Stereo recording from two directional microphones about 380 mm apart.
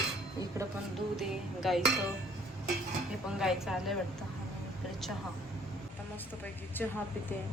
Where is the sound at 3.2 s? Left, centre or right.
Centre.